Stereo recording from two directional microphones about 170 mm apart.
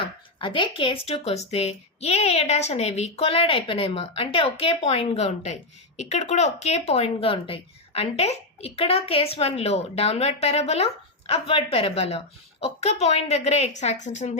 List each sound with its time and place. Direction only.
0.0 s speech: 30° left (ahead or behind)